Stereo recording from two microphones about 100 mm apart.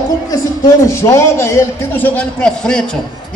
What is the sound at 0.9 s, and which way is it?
A man's voice, 25° left (ahead or behind).